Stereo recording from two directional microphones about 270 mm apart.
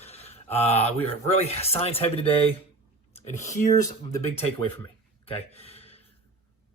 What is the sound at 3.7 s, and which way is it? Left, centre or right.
Speech, centre.